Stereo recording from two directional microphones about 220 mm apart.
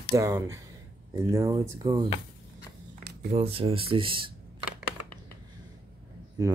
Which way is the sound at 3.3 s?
25° right (ahead or behind).